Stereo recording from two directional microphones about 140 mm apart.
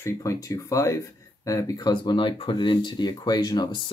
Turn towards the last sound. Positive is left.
turn(degrees=30)  # may be behind; listen again after turning